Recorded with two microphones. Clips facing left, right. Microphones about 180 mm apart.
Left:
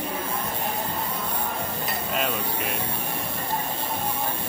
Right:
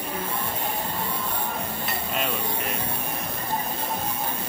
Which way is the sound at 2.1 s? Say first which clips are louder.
Left 1 dB; centre (ahead or behind).